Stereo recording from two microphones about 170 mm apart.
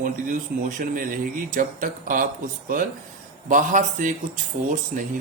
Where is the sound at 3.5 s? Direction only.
50° right (ahead or behind).